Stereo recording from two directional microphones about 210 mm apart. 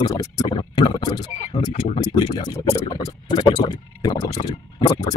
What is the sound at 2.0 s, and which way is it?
Speech, 20° left (ahead or behind).